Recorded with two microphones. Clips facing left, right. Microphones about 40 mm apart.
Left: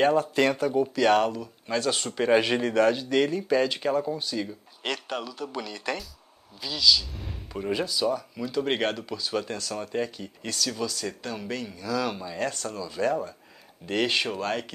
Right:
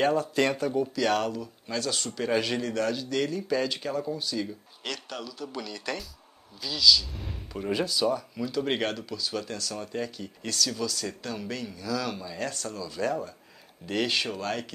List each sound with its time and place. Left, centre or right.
0.2 s speech: left
7.1 s speech: centre